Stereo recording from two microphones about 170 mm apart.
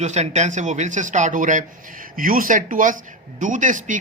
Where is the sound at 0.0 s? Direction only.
40° right (ahead or behind).